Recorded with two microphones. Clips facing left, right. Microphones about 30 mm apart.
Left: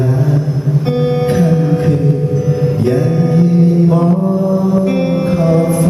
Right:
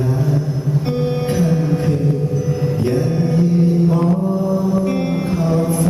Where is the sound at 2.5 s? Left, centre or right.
Centre.